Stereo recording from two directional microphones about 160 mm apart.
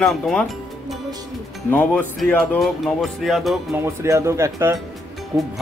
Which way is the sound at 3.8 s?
15° right (ahead or behind).